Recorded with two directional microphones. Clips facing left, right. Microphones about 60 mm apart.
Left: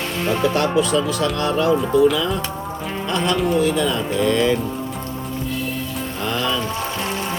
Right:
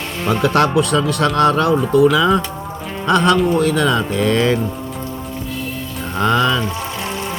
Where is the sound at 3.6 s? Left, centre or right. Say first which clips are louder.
Right 3 dB; right.